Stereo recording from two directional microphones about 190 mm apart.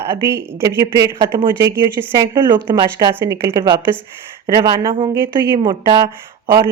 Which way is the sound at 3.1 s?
15° right (ahead or behind).